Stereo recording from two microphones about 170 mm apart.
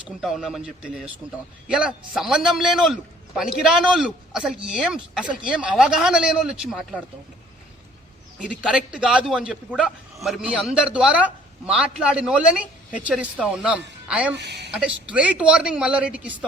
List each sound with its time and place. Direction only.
0.2 s a man's voice: centre (ahead or behind)
8.4 s a man's voice: 5° right (ahead or behind)
14.3 s a woman's voice: 90° right
14.7 s a woman's voice: 5° right (ahead or behind)